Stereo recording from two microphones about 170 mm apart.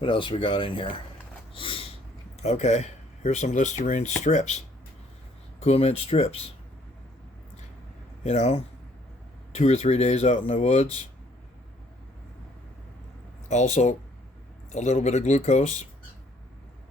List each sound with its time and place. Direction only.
0.0 s speech: 30° left (ahead or behind)
1.5 s snort: 30° left (ahead or behind)
2.4 s speech: 40° left (ahead or behind)
8.2 s speech: 40° left (ahead or behind)
13.5 s speech: 45° left (ahead or behind)